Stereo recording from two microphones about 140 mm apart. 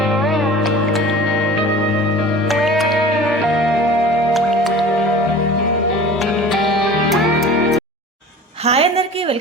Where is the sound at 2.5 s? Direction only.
Centre (ahead or behind).